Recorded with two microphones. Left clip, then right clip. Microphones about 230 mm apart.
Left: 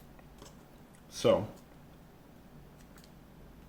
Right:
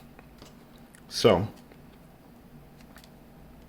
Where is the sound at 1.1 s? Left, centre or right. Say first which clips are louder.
Right 6 dB; right.